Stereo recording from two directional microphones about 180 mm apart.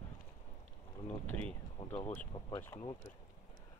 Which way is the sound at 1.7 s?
25° left (ahead or behind).